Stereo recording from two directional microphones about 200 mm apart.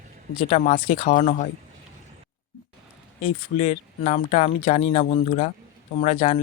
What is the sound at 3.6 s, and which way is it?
Speech, 35° left (ahead or behind).